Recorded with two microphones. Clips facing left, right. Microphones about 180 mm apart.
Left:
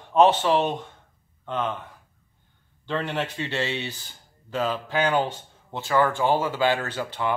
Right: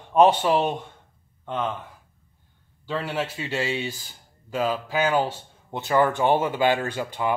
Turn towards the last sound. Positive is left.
turn(degrees=-15)  # may be behind; listen again after turning